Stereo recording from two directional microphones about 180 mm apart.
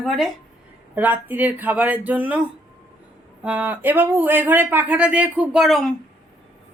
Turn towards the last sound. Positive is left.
turn(degrees=0)  # may be behind; listen again after turning